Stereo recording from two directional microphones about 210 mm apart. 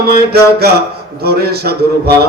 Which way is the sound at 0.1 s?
50° right (ahead or behind).